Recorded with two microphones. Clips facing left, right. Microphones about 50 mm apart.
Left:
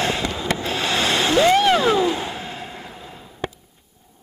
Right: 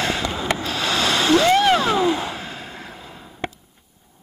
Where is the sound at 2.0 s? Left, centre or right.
Right.